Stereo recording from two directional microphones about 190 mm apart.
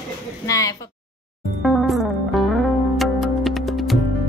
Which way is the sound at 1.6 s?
Centre (ahead or behind).